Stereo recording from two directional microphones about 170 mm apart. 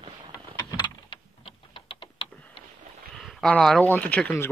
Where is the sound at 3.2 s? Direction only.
5° left (ahead or behind).